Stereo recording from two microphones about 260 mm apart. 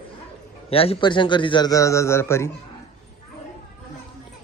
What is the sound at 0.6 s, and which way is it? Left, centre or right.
Speech, left.